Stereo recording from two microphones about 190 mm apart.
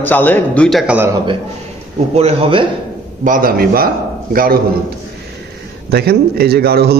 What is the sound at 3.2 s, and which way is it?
A man's voice, 45° right (ahead or behind).